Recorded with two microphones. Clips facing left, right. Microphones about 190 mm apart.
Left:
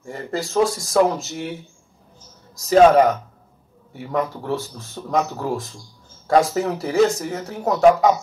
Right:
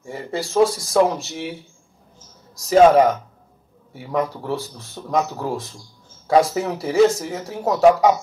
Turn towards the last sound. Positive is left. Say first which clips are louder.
# even
turn(degrees=-5)  # may be behind; listen again after turning